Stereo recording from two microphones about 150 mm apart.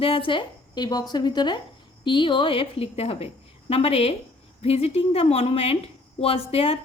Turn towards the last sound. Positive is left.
turn(degrees=40)  # may be behind; listen again after turning